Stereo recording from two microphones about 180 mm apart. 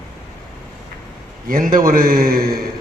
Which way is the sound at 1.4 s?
50° right (ahead or behind).